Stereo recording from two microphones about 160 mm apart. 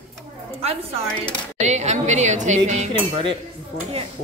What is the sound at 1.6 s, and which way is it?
A woman's voice, 45° right (ahead or behind).